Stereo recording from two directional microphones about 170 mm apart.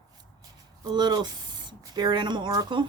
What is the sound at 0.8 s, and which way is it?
Speech, 25° right (ahead or behind).